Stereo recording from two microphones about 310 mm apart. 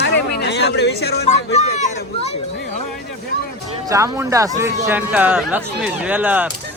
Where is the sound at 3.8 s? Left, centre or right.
Centre.